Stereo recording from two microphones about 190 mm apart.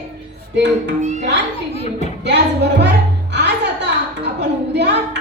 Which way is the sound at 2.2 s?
65° right (ahead or behind).